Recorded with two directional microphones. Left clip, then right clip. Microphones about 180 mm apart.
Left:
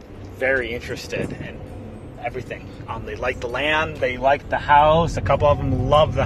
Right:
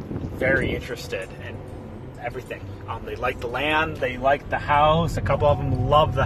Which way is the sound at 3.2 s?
15° right (ahead or behind).